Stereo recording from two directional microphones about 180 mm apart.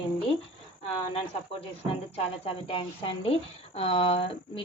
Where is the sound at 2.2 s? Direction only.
30° left (ahead or behind).